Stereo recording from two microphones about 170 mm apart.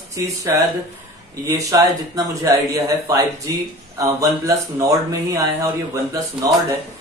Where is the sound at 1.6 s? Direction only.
20° right (ahead or behind).